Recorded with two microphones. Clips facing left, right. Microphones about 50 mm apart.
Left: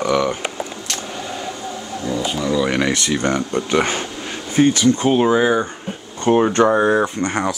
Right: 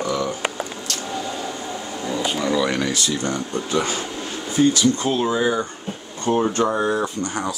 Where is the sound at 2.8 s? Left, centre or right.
Left.